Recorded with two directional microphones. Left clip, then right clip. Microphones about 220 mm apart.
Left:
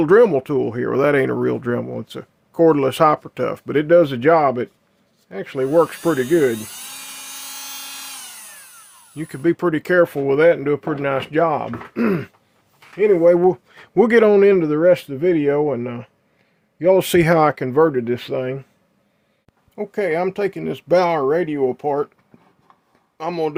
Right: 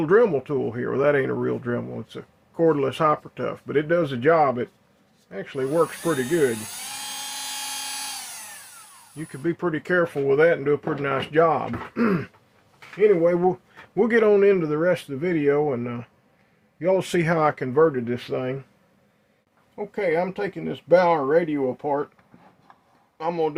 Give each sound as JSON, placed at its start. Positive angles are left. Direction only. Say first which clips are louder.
{"t": 0.0, "sound": "speech", "louder": "left 6 dB", "side_deg": 55}
{"t": 9.1, "sound": "speech", "louder": "left 8 dB", "side_deg": 60}
{"t": 19.7, "sound": "speech", "louder": "left 3 dB", "side_deg": 60}
{"t": 23.1, "sound": "speech", "louder": "left 2 dB", "side_deg": 55}